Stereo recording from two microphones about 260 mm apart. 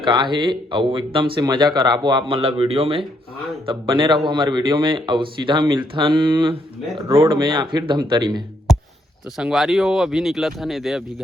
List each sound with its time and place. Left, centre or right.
0.0 s speech: centre
9.4 s speech: centre